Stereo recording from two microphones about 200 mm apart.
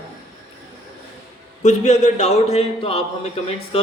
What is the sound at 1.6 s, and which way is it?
Speech, 35° left (ahead or behind).